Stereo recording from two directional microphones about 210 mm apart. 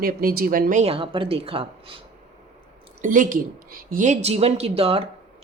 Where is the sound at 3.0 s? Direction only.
40° right (ahead or behind).